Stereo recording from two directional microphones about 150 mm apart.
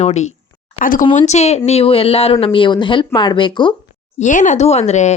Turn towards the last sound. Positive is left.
turn(degrees=50)  # may be behind; listen again after turning